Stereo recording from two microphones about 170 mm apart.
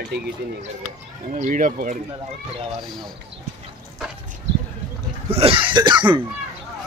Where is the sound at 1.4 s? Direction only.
50° right (ahead or behind).